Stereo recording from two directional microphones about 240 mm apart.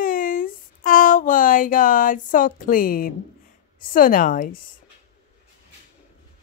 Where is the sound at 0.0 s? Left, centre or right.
Left.